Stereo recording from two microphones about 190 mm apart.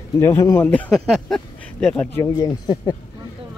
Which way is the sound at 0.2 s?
15° left (ahead or behind).